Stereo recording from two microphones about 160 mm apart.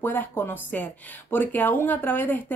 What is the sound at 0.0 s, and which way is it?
Speech, 15° left (ahead or behind).